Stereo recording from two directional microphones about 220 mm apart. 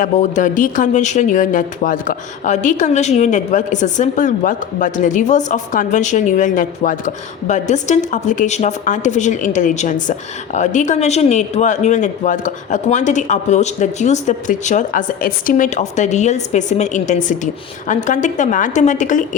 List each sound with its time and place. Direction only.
0.0 s speech: 35° left (ahead or behind)